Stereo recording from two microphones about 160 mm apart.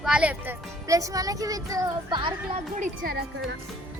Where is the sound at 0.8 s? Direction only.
20° right (ahead or behind).